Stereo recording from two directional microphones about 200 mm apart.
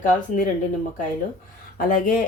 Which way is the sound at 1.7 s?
40° left (ahead or behind).